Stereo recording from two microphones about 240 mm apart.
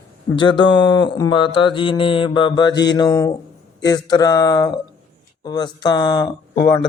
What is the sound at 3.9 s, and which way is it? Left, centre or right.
Speech, centre.